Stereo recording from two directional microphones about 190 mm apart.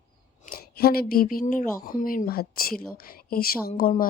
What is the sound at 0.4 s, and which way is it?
Speech, 50° left (ahead or behind).